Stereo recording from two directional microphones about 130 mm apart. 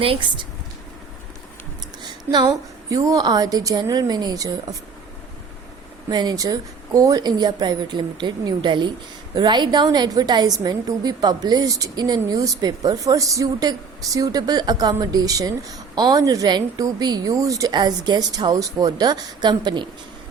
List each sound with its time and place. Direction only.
0.0 s a woman's voice: 40° right (ahead or behind)
2.0 s a woman's voice: 35° right (ahead or behind)
6.1 s a woman's voice: 30° right (ahead or behind)